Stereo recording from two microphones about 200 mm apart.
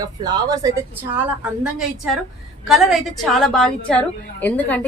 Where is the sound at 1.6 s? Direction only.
Centre (ahead or behind).